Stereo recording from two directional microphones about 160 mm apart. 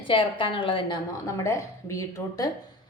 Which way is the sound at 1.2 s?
20° left (ahead or behind).